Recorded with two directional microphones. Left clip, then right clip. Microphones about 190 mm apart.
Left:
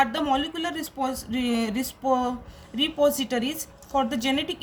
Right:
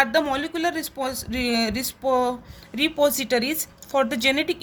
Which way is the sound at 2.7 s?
40° right (ahead or behind).